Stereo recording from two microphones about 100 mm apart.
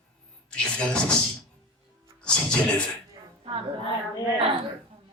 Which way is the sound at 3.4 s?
70° right (ahead or behind).